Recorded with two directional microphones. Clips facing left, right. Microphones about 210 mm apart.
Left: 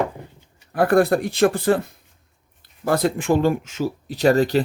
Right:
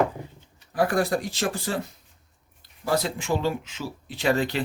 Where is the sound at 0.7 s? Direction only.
60° left (ahead or behind).